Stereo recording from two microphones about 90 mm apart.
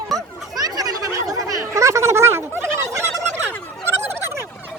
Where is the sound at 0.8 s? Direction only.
45° right (ahead or behind).